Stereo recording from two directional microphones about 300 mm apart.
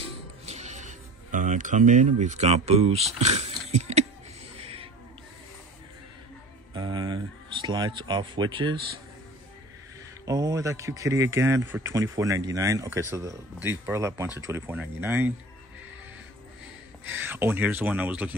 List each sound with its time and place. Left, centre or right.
0.5 s speech: right
4.6 s a sound: centre
6.7 s speech: centre
10.2 s speech: centre
17.0 s speech: centre